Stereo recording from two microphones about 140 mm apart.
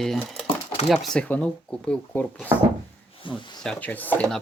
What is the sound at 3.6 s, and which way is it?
Speech, 10° left (ahead or behind).